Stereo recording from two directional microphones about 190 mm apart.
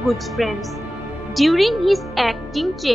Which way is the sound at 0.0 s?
Centre (ahead or behind).